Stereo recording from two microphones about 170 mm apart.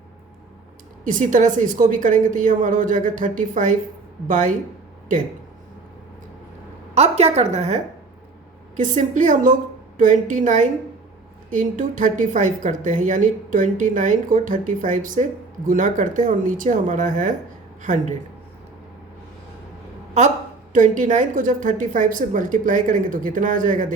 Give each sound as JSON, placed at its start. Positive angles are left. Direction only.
{"t": 1.0, "sound": "a woman's voice", "side_deg": -50}
{"t": 6.9, "sound": "a woman's voice", "side_deg": -40}
{"t": 20.7, "sound": "a woman's voice", "side_deg": -50}